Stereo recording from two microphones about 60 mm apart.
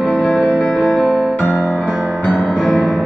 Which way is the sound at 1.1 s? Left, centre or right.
Centre.